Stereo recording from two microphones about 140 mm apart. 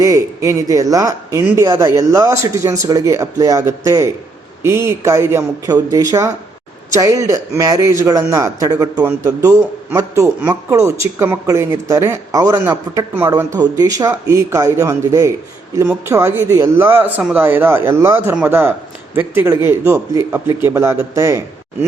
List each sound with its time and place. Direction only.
0.0 s a man's voice: 25° right (ahead or behind)